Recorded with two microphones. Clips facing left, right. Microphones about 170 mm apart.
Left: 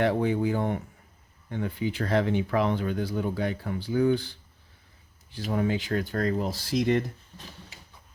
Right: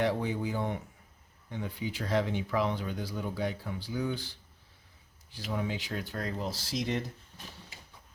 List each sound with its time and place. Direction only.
0.0 s speech: 60° left (ahead or behind)